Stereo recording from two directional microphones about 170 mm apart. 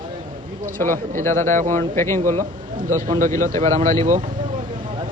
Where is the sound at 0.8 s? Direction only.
15° left (ahead or behind).